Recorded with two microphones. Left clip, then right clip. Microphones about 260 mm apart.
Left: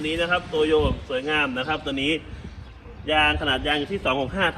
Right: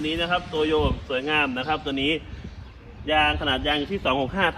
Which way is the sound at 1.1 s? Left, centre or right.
Right.